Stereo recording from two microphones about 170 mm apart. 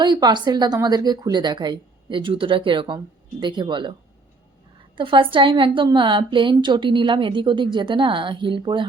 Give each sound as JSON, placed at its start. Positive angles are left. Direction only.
{"t": 0.0, "sound": "a woman's voice", "side_deg": -25}
{"t": 4.9, "sound": "a woman's voice", "side_deg": -30}